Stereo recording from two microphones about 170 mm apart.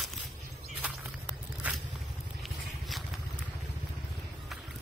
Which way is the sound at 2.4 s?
Centre (ahead or behind).